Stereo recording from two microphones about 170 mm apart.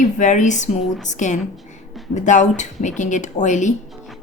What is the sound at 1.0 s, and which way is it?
A woman's voice, 45° left (ahead or behind).